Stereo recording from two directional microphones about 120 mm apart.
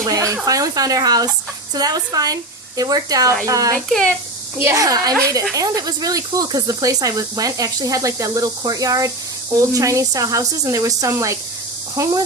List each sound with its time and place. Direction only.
0.0 s speech: 30° right (ahead or behind)
3.8 s speech: 5° left (ahead or behind)
4.5 s speech: 20° right (ahead or behind)